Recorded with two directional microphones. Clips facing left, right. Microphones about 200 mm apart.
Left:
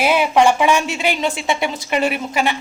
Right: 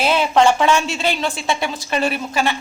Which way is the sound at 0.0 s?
10° left (ahead or behind).